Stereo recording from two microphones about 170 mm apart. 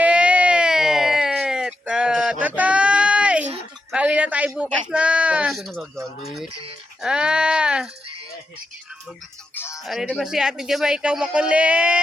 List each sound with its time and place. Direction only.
0.0 s a sound: 5° right (ahead or behind)
3.9 s speech: 10° right (ahead or behind)
7.0 s speech: 5° right (ahead or behind)
9.6 s music: 15° left (ahead or behind)
9.8 s speech: centre (ahead or behind)